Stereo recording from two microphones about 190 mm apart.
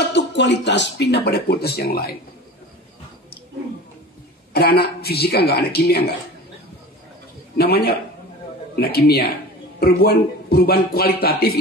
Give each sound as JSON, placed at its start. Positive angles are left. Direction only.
{"t": 0.1, "sound": "speech", "side_deg": 65}
{"t": 4.6, "sound": "speech", "side_deg": 55}
{"t": 7.5, "sound": "speech", "side_deg": 55}